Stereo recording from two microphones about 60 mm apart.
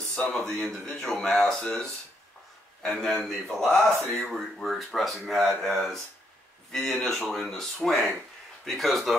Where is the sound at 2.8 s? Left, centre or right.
Centre.